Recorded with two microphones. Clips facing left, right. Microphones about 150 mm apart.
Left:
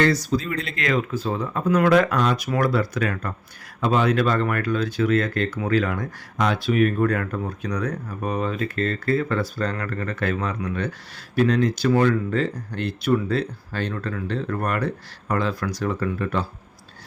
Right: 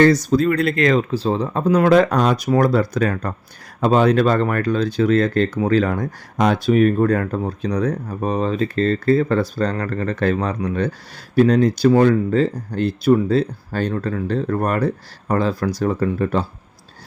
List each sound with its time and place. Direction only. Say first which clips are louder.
0.0 s speech: right 7 dB; 45° right (ahead or behind)
0.8 s speech: right 7 dB; 35° right (ahead or behind)